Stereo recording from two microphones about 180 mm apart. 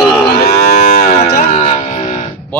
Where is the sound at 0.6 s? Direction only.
40° left (ahead or behind).